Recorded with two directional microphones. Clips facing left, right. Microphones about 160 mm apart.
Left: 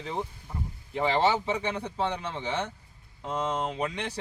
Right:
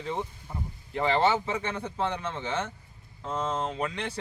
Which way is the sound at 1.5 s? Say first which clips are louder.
Left 2 dB; 15° left (ahead or behind).